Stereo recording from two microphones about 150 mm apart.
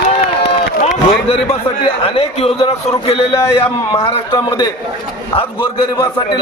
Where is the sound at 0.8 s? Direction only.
45° left (ahead or behind).